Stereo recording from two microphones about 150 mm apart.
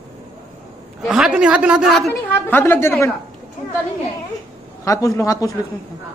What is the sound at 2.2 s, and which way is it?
Speech, 15° left (ahead or behind).